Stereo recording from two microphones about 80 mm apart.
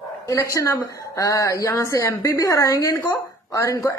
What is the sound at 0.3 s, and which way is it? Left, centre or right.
A woman's voice, left.